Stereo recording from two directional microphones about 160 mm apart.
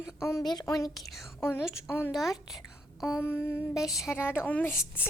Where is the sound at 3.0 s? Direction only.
15° left (ahead or behind).